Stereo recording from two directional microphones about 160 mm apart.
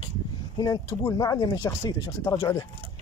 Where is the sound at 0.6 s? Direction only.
20° left (ahead or behind).